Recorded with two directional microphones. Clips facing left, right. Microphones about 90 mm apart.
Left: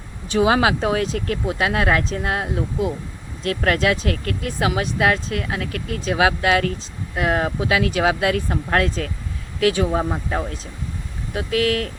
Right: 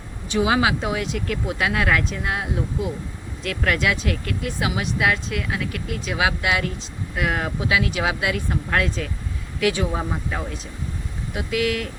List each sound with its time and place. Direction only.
0.3 s speech: 40° left (ahead or behind)
9.6 s speech: 35° left (ahead or behind)